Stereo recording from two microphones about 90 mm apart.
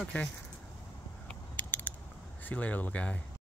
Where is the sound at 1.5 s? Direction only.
20° left (ahead or behind).